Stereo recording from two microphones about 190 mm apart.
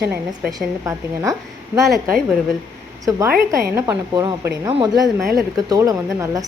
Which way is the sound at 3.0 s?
15° right (ahead or behind).